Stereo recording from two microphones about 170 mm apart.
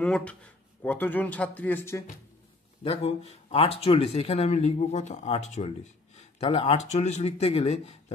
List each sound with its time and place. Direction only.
0.0 s speech: 5° left (ahead or behind)
2.8 s speech: 35° left (ahead or behind)